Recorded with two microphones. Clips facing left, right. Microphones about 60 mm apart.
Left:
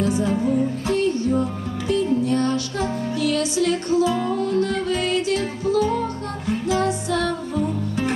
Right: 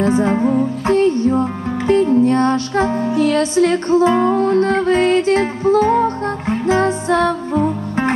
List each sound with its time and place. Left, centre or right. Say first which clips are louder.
0.0 s music: right 6 dB; right